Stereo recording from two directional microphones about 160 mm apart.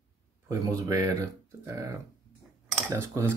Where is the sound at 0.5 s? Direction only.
20° right (ahead or behind).